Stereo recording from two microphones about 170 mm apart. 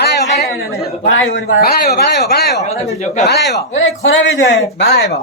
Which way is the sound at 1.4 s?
70° left (ahead or behind).